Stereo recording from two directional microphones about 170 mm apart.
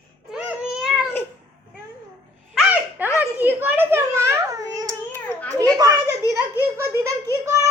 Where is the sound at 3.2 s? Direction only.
10° right (ahead or behind).